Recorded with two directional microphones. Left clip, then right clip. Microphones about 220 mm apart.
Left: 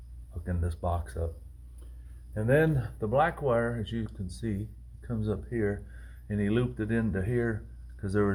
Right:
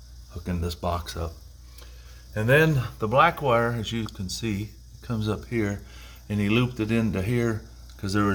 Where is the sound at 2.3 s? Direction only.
30° right (ahead or behind).